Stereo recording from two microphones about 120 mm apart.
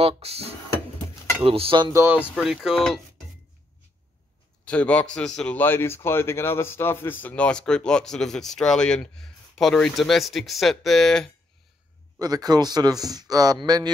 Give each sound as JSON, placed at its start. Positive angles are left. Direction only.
{"t": 0.0, "sound": "speech", "side_deg": -60}
{"t": 1.8, "sound": "speech", "side_deg": -30}
{"t": 2.3, "sound": "speech", "side_deg": 0}
{"t": 4.6, "sound": "a man's voice", "side_deg": 10}
{"t": 12.2, "sound": "speech", "side_deg": -35}